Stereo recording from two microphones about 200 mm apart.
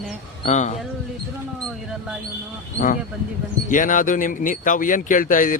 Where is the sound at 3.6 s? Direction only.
40° left (ahead or behind).